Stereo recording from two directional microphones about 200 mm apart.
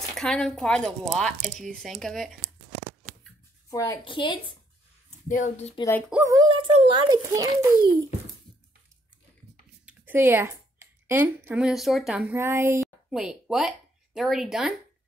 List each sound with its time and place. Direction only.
0.1 s speech: 5° left (ahead or behind)
3.7 s a woman's voice: 15° left (ahead or behind)
5.3 s speech: 35° left (ahead or behind)
5.8 s speech: 10° left (ahead or behind)
6.2 s a child's voice: 20° right (ahead or behind)
9.8 s a woman's voice: 10° right (ahead or behind)